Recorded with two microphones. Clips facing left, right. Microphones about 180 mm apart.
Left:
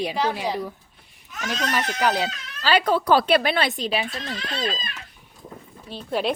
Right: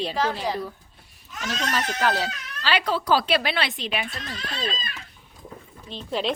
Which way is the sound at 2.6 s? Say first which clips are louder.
Left 4 dB; 45° left (ahead or behind).